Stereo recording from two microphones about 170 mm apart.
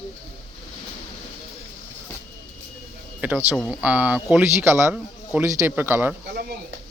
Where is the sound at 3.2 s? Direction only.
10° right (ahead or behind).